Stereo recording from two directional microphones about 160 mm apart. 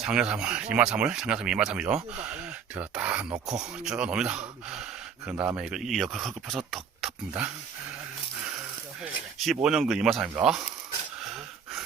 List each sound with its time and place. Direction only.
0.0 s speech: 5° right (ahead or behind)
5.3 s speech: 15° right (ahead or behind)
5.5 s speech: 5° right (ahead or behind)
9.4 s speech: centre (ahead or behind)